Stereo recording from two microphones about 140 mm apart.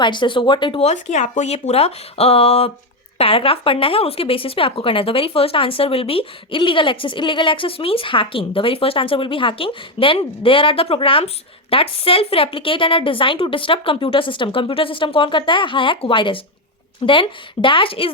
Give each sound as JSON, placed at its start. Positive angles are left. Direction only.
{"t": 0.0, "sound": "speech", "side_deg": 35}
{"t": 0.8, "sound": "speech", "side_deg": 55}